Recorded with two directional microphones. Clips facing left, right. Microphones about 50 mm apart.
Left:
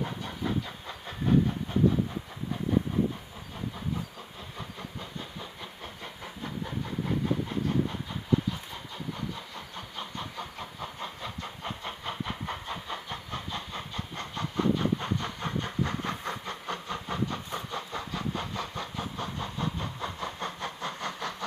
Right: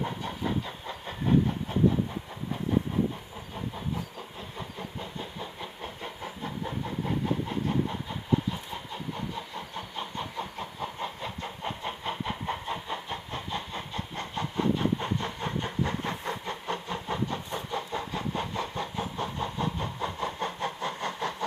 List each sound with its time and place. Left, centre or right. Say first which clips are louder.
0.0 s train: right 1 dB; centre
4.6 s vehicle: right 2 dB; centre
7.9 s train: even; centre
8.5 s vehicle: right 1 dB; right